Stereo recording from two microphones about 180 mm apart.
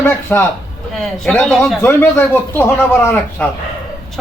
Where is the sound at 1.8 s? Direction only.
10° left (ahead or behind).